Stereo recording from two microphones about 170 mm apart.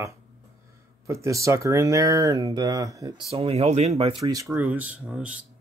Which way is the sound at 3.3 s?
35° right (ahead or behind).